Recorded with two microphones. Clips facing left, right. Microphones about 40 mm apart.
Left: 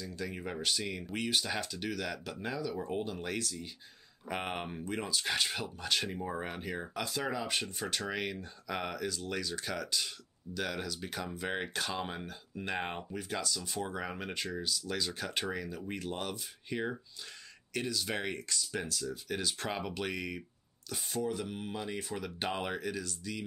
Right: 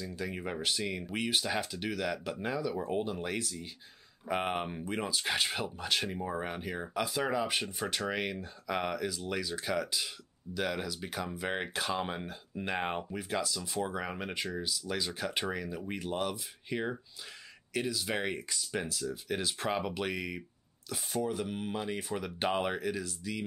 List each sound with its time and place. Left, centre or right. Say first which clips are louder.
0.0 s speech: right 2 dB; centre